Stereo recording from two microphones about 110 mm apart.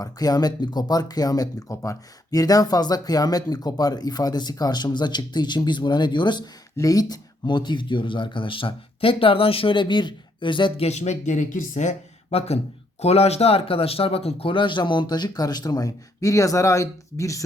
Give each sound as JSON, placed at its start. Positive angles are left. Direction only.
{"t": 0.0, "sound": "speech", "side_deg": 35}
{"t": 6.7, "sound": "speech", "side_deg": 35}
{"t": 10.8, "sound": "speech", "side_deg": 90}
{"t": 11.8, "sound": "speech", "side_deg": 80}